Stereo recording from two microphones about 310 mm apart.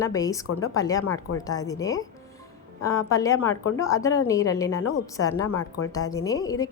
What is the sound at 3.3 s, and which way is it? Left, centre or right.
Speech, left.